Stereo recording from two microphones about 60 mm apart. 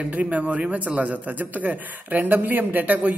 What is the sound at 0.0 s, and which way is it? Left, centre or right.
A man's voice, right.